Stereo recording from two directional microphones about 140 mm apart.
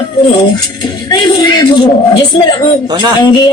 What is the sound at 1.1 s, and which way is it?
Speech, 30° left (ahead or behind).